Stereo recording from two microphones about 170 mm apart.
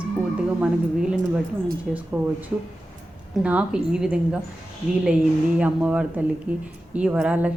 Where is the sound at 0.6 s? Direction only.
5° right (ahead or behind).